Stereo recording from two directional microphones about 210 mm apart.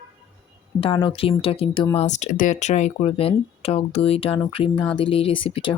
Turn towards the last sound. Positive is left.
turn(degrees=25)  # may be behind; listen again after turning